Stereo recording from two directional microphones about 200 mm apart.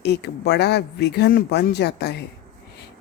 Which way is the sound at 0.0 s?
55° left (ahead or behind).